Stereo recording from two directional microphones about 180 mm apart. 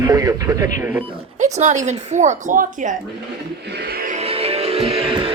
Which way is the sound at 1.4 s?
40° right (ahead or behind).